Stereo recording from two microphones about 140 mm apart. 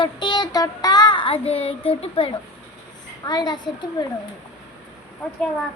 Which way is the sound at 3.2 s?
30° left (ahead or behind).